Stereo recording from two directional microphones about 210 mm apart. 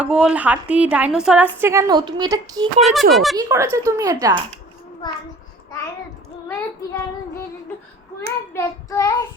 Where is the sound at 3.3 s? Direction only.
15° right (ahead or behind).